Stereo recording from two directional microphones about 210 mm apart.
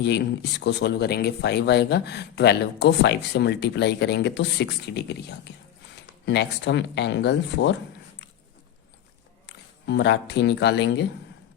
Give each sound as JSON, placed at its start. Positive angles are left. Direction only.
{"t": 0.0, "sound": "speech", "side_deg": 55}
{"t": 9.5, "sound": "speech", "side_deg": 55}